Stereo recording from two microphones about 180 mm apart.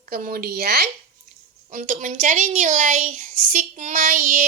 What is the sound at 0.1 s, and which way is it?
Speech, 55° right (ahead or behind).